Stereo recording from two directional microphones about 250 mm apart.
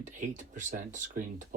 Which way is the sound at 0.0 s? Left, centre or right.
Right.